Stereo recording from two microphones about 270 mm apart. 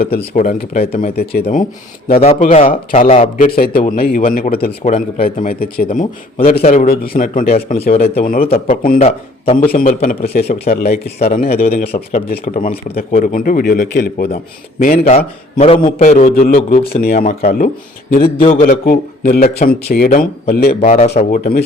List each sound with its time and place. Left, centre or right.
0.2 s a man's voice: left
1.1 s a man's voice: left
2.3 s a man's voice: left
14.8 s a man's voice: left
18.9 s a man's voice: left